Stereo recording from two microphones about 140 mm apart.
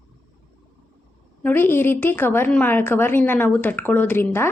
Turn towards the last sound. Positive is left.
turn(degrees=15)  # may be behind; listen again after turning